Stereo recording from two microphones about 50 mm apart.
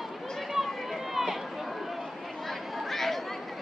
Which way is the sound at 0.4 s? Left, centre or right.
Centre.